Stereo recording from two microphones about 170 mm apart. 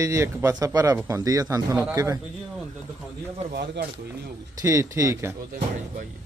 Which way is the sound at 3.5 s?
70° right (ahead or behind).